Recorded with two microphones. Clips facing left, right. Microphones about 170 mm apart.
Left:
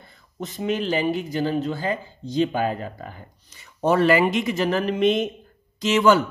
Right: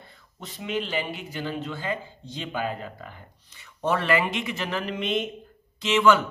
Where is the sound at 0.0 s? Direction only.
45° left (ahead or behind).